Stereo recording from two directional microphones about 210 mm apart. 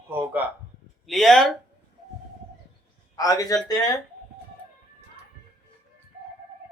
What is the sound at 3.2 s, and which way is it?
Speech, 15° left (ahead or behind).